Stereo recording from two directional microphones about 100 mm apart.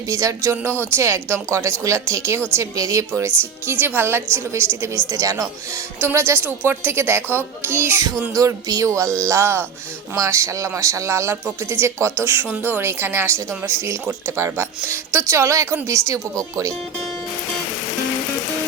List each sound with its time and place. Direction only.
0.1 s a woman's voice: 30° right (ahead or behind)
8.3 s a woman's voice: 35° right (ahead or behind); by 14.3 s 20° right (ahead or behind)
14.3 s a woman's voice: 30° right (ahead or behind)